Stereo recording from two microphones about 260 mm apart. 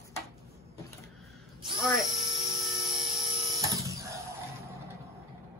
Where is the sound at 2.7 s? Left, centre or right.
Centre.